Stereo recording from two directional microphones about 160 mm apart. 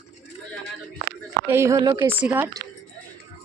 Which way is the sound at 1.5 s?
15° right (ahead or behind).